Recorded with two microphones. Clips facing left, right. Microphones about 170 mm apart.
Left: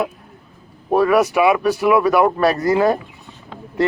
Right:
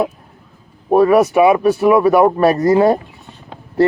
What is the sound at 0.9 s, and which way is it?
Speech, 25° right (ahead or behind).